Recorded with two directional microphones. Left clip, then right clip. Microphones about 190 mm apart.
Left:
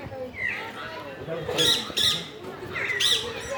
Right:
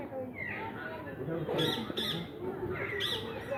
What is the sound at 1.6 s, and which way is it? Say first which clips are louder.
Squawk: left 13 dB; 45° left (ahead or behind).